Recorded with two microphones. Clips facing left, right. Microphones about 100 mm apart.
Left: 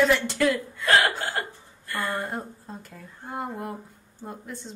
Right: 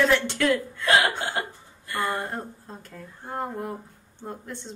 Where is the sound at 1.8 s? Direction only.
20° right (ahead or behind).